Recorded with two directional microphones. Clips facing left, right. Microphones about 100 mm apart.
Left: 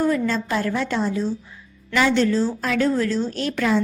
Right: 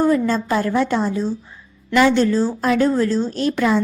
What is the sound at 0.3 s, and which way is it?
A woman's voice, 40° right (ahead or behind).